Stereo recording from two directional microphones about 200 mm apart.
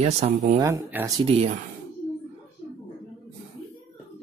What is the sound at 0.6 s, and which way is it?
Speech, 15° right (ahead or behind).